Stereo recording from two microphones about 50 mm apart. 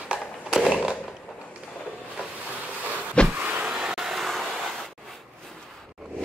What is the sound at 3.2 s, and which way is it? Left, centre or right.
Vehicle, right.